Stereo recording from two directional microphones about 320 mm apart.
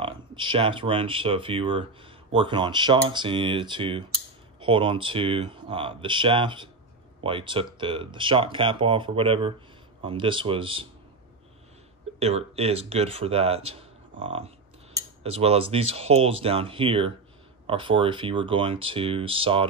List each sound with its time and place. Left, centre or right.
0.0 s speech: centre
12.2 s speech: centre
13.7 s a sound: centre
15.0 s cutlery: centre
15.9 s speech: centre